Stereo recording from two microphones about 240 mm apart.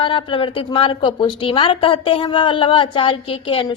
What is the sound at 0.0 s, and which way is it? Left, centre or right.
A woman's voice, left.